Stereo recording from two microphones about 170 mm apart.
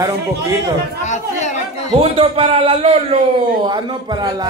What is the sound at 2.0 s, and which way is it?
A man's voice, 35° right (ahead or behind).